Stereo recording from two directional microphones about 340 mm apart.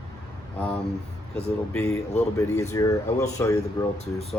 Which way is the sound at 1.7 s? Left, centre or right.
Centre.